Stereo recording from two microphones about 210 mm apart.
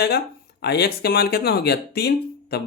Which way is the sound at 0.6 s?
50° left (ahead or behind).